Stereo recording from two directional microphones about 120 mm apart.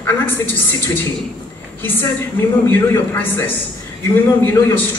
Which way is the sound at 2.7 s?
15° left (ahead or behind).